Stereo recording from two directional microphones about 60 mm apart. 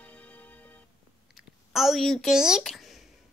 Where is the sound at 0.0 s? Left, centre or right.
Left.